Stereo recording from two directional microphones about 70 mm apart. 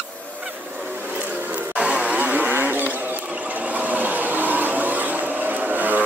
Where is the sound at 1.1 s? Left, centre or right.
Right.